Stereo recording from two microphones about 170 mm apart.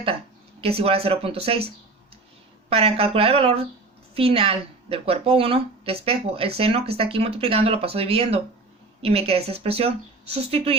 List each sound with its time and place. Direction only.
0.6 s speech: 35° right (ahead or behind)